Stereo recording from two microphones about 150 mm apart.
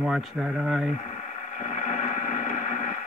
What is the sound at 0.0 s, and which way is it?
Speech, 5° right (ahead or behind).